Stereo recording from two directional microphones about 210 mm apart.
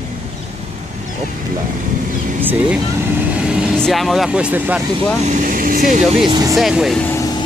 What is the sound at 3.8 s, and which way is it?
Speech, centre (ahead or behind).